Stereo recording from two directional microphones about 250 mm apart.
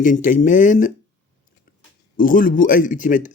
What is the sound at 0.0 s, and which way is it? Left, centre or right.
Speech, left.